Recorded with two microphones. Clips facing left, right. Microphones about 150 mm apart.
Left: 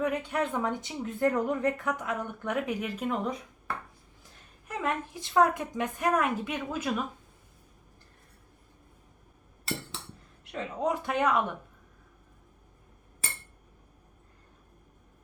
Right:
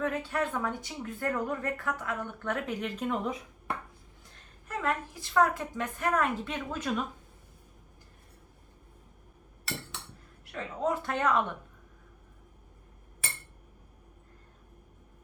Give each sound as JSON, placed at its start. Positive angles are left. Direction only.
{"t": 0.0, "sound": "speech", "side_deg": 15}
{"t": 4.7, "sound": "speech", "side_deg": 20}
{"t": 10.4, "sound": "speech", "side_deg": 20}